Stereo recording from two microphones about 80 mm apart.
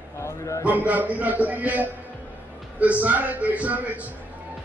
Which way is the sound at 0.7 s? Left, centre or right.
Centre.